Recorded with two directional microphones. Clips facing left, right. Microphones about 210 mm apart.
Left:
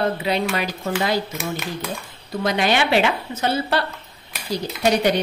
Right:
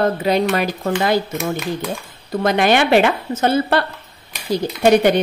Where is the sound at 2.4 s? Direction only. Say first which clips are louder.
Right 5 dB; 55° right (ahead or behind).